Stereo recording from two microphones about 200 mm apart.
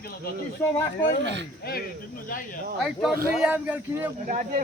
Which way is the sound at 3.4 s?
5° right (ahead or behind).